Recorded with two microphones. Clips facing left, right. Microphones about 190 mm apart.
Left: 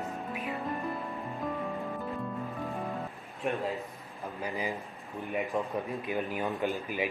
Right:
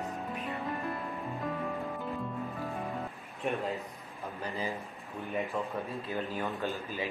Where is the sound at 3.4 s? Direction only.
Centre (ahead or behind).